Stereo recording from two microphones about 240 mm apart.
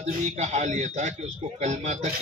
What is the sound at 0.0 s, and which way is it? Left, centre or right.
Speech, right.